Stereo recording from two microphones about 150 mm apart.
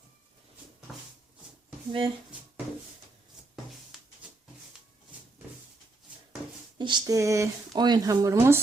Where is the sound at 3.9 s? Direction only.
Centre (ahead or behind).